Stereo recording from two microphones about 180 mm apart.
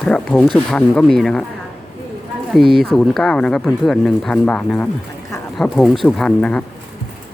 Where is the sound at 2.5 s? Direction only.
Centre (ahead or behind).